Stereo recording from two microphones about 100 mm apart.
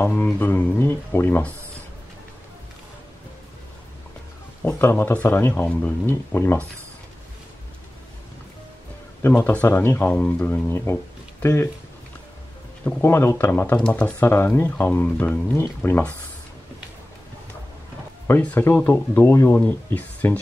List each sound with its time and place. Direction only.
0.0 s music: 20° left (ahead or behind)
0.4 s speech: 20° left (ahead or behind)
4.6 s speech: 20° left (ahead or behind)
9.2 s speech: 15° left (ahead or behind)
12.8 s speech: 25° left (ahead or behind)
13.8 s music: 10° left (ahead or behind)
14.2 s speech: 25° left (ahead or behind)
18.4 s speech: 20° left (ahead or behind)